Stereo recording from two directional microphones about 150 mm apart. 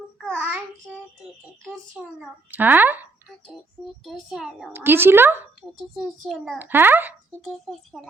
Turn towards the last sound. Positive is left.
turn(degrees=0)  # may be behind; listen again after turning